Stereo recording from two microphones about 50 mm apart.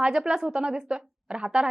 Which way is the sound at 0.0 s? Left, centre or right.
Centre.